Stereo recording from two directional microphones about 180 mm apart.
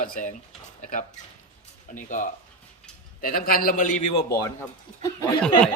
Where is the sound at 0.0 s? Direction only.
50° left (ahead or behind).